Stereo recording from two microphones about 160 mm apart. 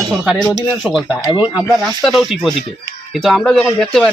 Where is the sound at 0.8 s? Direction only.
Centre (ahead or behind).